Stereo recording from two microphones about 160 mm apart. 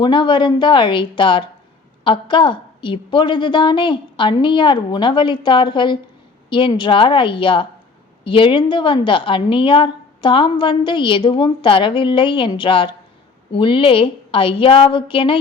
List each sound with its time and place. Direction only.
0.0 s a woman's voice: 30° left (ahead or behind)